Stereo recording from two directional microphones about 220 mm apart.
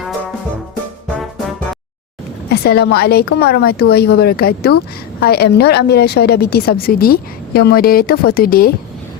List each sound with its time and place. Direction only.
2.5 s a woman's voice: 45° left (ahead or behind)